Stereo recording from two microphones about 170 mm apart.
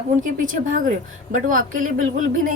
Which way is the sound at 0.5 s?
50° right (ahead or behind).